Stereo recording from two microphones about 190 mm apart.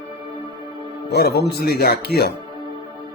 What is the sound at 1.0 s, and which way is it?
Speech, 55° left (ahead or behind).